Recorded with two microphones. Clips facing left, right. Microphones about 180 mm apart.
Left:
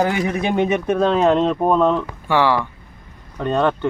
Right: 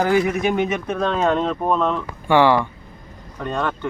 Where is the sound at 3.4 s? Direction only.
30° left (ahead or behind).